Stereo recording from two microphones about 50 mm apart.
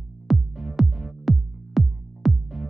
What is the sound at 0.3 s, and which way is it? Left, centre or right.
Music, centre.